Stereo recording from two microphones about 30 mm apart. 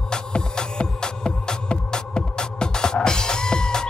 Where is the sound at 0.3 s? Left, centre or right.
Left.